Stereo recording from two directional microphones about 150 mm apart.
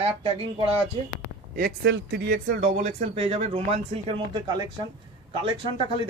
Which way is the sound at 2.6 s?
50° right (ahead or behind).